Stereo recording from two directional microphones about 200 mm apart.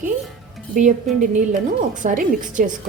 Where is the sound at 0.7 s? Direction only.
40° right (ahead or behind).